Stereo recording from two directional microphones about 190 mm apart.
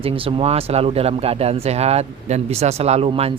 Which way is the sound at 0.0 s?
30° right (ahead or behind).